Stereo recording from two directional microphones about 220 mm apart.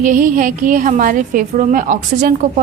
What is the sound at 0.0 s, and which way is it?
A woman's voice, 35° right (ahead or behind).